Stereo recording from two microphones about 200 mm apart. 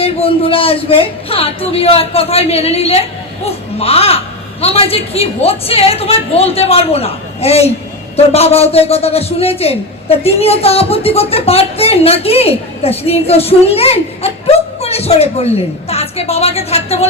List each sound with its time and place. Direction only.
0.0 s a man's voice: 30° left (ahead or behind)